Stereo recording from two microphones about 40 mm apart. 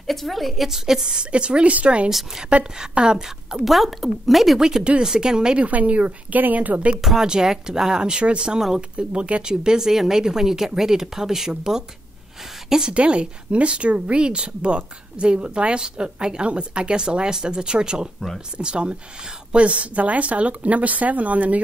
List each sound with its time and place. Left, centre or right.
0.0 s a woman's voice: centre
0.7 s speech: centre; by 2.0 s right
2.0 s speech: centre
2.9 s speech: right
3.6 s speech: centre
4.6 s speech: centre
5.6 s a woman's voice: right
7.0 s speech: centre; by 8.5 s right
8.5 s speech: centre
8.9 s a woman's voice: right
12.9 s speech: right